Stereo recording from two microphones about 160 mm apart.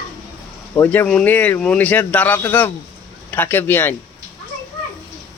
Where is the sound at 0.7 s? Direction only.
10° left (ahead or behind).